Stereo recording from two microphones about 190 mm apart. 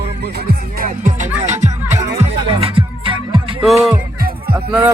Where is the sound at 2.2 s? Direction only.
30° right (ahead or behind).